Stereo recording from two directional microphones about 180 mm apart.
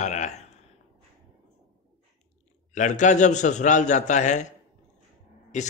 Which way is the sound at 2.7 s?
45° left (ahead or behind).